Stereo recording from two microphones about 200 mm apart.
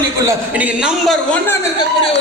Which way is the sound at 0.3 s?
5° right (ahead or behind).